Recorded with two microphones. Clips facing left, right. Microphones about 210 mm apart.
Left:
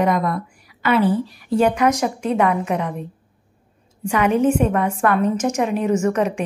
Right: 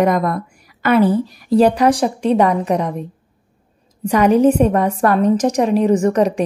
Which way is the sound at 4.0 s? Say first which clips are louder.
Right 5 dB; 40° right (ahead or behind).